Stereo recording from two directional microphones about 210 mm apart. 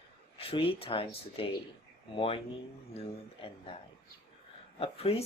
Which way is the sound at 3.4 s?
25° left (ahead or behind).